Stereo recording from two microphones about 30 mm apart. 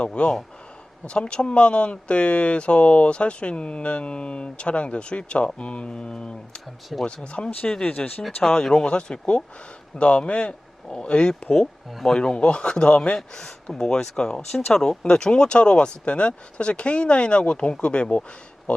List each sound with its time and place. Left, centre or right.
0.0 s speech: left
5.9 s speech: left
6.9 s speech: centre
7.3 s speech: left
8.4 s speech: centre; by 13.0 s left
13.1 s speech: centre
14.5 s speech: centre
15.1 s speech: left